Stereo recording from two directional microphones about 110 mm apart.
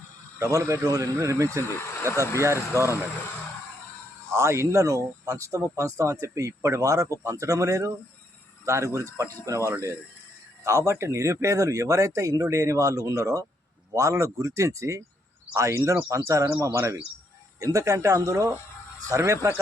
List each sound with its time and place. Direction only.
0.3 s speech: 30° right (ahead or behind)
1.6 s speech: 25° left (ahead or behind)
4.4 s speech: 25° right (ahead or behind)